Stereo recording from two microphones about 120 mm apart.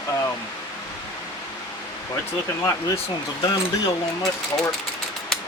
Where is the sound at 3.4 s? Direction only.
40° left (ahead or behind).